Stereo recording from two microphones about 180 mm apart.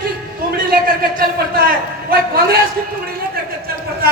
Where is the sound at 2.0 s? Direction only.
55° right (ahead or behind).